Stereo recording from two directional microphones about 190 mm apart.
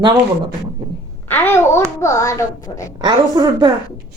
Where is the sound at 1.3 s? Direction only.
10° left (ahead or behind).